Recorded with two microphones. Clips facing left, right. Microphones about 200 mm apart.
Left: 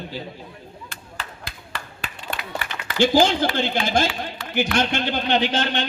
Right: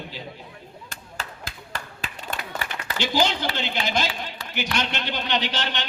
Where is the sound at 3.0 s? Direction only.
50° left (ahead or behind).